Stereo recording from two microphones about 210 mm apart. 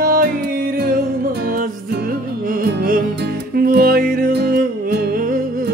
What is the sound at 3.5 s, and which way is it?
Music, 45° right (ahead or behind).